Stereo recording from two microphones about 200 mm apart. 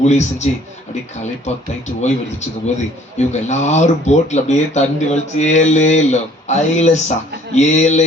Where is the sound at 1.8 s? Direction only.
35° left (ahead or behind).